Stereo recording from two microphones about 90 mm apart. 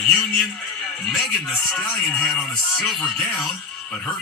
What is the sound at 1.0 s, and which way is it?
Speech, 10° left (ahead or behind).